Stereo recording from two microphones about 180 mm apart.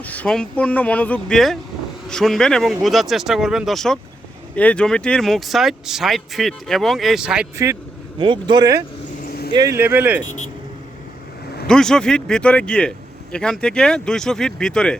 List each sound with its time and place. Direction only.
0.0 s speech: 10° left (ahead or behind)
7.5 s speech: 15° right (ahead or behind)
8.2 s speech: 25° right (ahead or behind)
9.2 s vehicle: 60° left (ahead or behind)
9.5 s speech: 20° right (ahead or behind)
11.7 s speech: 5° left (ahead or behind)